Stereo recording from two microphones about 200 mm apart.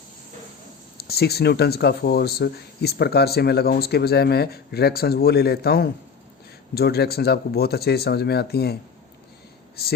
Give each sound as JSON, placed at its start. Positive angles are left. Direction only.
{"t": 0.9, "sound": "speech", "side_deg": 50}